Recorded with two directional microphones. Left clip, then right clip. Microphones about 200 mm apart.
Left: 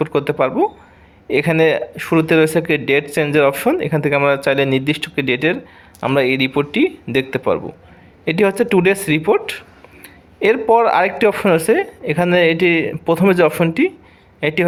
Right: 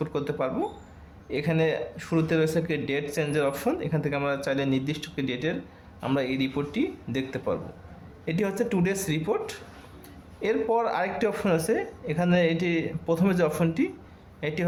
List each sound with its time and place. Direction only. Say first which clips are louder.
0.0 s speech: left 12 dB; 35° left (ahead or behind)